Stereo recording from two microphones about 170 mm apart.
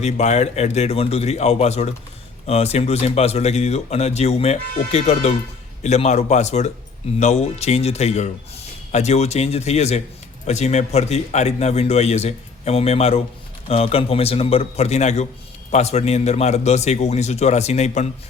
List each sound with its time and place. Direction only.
0.0 s a man's voice: 40° left (ahead or behind)